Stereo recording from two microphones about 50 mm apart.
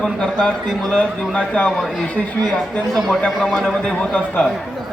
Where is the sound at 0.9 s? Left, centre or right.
Left.